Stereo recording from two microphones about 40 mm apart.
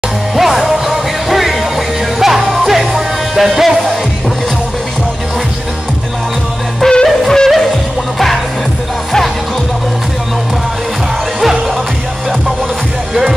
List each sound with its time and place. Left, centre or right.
0.4 s music: centre
6.9 s music: centre
11.4 s music: centre